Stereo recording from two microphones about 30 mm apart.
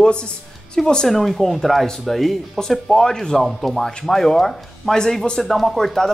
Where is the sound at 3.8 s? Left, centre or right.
Centre.